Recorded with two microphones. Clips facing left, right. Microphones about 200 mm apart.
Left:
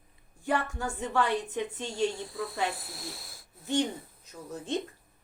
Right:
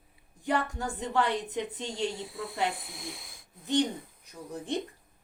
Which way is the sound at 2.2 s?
Centre (ahead or behind).